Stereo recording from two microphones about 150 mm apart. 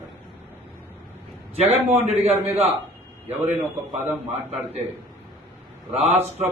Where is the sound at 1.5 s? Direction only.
45° right (ahead or behind).